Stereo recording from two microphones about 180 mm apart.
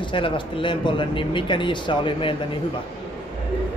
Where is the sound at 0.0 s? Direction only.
30° left (ahead or behind).